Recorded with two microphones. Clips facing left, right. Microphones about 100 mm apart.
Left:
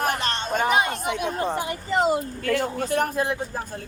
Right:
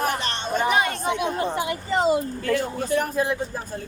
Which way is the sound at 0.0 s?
45° left (ahead or behind).